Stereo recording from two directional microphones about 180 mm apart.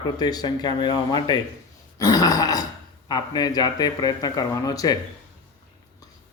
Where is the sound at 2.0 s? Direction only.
20° left (ahead or behind).